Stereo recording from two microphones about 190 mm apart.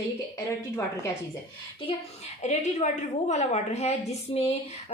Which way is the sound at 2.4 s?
40° left (ahead or behind).